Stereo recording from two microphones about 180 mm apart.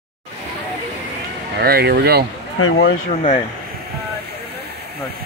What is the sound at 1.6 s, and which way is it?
Speech, 60° right (ahead or behind).